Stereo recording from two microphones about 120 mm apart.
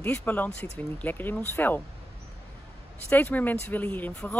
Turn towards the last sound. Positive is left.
turn(degrees=10)  # may be behind; listen again after turning